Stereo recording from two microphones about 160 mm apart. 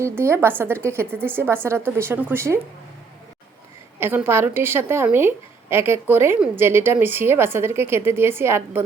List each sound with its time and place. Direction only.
0.0 s a woman's voice: 15° right (ahead or behind)
4.0 s a woman's voice: 15° right (ahead or behind)